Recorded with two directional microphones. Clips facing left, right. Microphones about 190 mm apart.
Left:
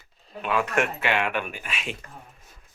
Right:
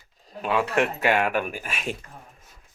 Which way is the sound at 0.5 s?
30° right (ahead or behind).